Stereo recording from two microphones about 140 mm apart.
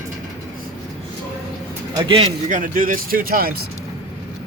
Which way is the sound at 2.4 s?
70° right (ahead or behind).